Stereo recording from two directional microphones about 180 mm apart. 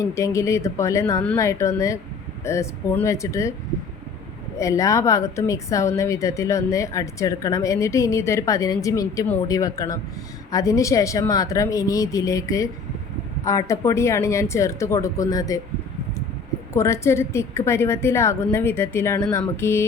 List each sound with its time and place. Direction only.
0.0 s a woman's voice: 15° left (ahead or behind)
4.5 s a woman's voice: 15° left (ahead or behind)
16.7 s a woman's voice: 15° left (ahead or behind)